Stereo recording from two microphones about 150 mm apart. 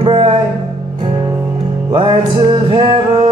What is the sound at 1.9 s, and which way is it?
Music, 35° right (ahead or behind).